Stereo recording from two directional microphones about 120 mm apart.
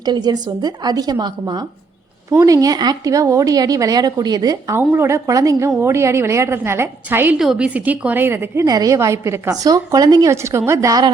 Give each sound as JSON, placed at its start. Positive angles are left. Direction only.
{"t": 0.0, "sound": "speech", "side_deg": -35}
{"t": 4.8, "sound": "a woman's voice", "side_deg": -20}
{"t": 7.3, "sound": "a woman's voice", "side_deg": -5}
{"t": 8.6, "sound": "a woman's voice", "side_deg": -30}